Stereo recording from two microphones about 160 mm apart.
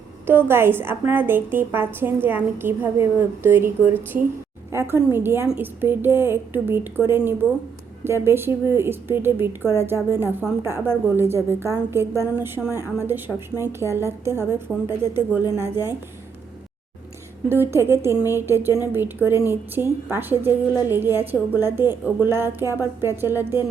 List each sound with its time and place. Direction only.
0.3 s a woman's voice: 15° right (ahead or behind)
14.7 s speech: centre (ahead or behind)
15.1 s a woman's voice: 15° right (ahead or behind)
17.5 s a woman's voice: 15° right (ahead or behind)